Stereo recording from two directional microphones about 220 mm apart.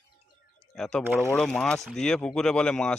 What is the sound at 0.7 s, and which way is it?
Speech, centre (ahead or behind).